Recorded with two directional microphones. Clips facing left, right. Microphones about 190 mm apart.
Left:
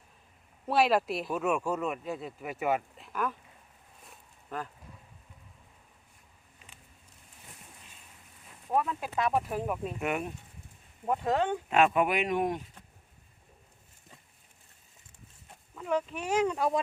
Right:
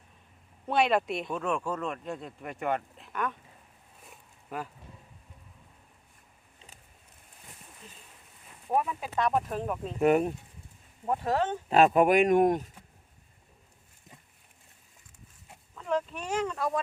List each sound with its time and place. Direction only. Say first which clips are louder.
0.7 s speech: even; 5° left (ahead or behind)
4.4 s speech: right 1 dB; 10° right (ahead or behind)
8.7 s speech: right 1 dB; 15° right (ahead or behind)
9.0 s speech: right 1 dB; 5° left (ahead or behind)
10.0 s speech: right 13 dB; 35° right (ahead or behind)
11.7 s speech: right 5 dB; 40° right (ahead or behind)
15.8 s speech: even; 5° left (ahead or behind)